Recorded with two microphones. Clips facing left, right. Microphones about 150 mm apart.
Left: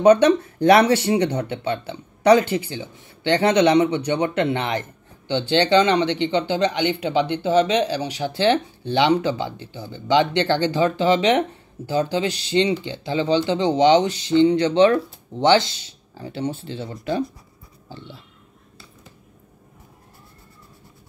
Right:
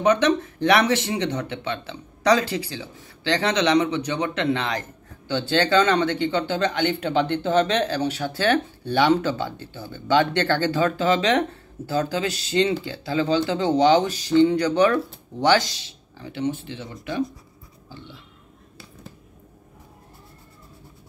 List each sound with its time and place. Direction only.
0.0 s speech: 30° left (ahead or behind)